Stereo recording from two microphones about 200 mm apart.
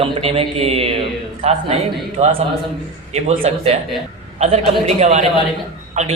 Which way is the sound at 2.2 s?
30° right (ahead or behind).